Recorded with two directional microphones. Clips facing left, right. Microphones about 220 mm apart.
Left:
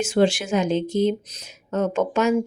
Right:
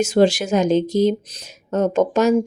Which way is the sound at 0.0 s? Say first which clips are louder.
Right 4 dB; 40° right (ahead or behind).